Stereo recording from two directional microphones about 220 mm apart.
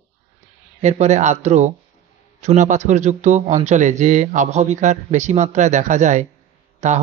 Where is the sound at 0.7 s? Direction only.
30° right (ahead or behind).